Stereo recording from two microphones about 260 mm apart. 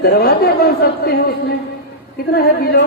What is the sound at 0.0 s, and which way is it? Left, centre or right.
A woman's voice, left.